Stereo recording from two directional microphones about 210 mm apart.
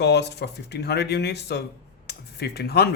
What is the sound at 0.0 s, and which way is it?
Speech, 55° left (ahead or behind).